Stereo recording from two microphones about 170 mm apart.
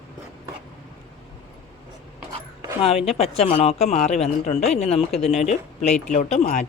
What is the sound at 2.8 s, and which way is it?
Speech, 35° left (ahead or behind).